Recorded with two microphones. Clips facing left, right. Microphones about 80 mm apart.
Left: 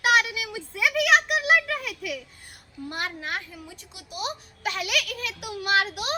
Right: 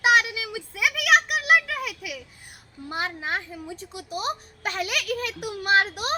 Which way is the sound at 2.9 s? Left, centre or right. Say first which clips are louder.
Right 3 dB; right.